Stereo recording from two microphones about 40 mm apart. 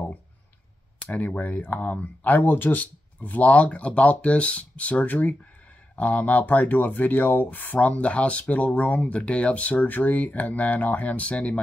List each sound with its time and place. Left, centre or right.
1.0 s speech: left